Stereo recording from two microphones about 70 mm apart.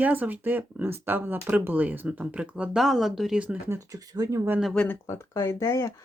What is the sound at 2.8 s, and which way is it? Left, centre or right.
Speech, centre.